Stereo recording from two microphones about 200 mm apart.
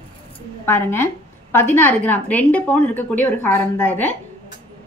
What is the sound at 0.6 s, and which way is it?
A woman's voice, 10° left (ahead or behind).